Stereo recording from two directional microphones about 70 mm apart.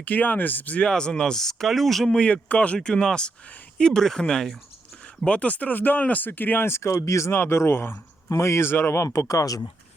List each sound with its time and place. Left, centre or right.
0.0 s speech: left
0.9 s speech: centre
2.0 s speech: centre
5.2 s speech: centre; by 9.0 s left
9.0 s speech: left